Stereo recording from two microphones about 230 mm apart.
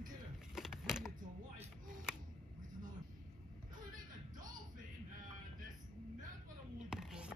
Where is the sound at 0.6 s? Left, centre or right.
Centre.